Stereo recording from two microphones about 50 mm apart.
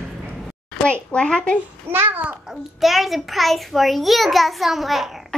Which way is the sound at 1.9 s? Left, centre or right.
Right.